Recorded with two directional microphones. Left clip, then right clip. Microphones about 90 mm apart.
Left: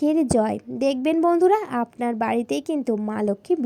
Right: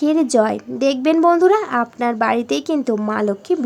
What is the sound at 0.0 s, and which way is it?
A woman's voice, 60° left (ahead or behind).